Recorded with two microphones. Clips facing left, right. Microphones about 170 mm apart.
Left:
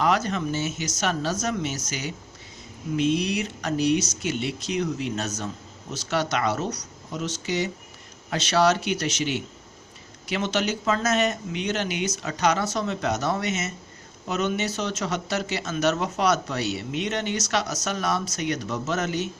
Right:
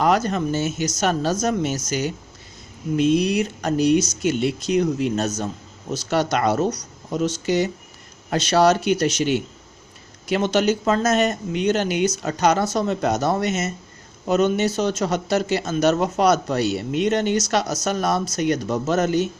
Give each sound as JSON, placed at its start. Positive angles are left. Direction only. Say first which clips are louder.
{"t": 0.0, "sound": "speech", "louder": "right 4 dB", "side_deg": -45}